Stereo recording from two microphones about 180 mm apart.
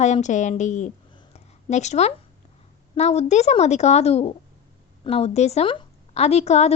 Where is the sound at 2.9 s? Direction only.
35° left (ahead or behind).